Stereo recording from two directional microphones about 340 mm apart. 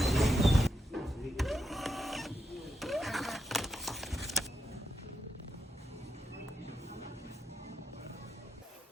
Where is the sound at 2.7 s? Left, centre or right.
Centre.